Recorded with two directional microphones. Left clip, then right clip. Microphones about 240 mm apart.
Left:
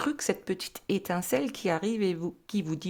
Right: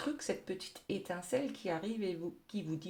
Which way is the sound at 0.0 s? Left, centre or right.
Left.